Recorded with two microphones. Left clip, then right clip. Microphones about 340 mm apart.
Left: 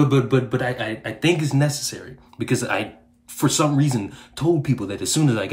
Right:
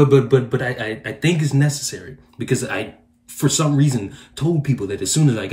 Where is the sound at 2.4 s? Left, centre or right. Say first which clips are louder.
Even; centre.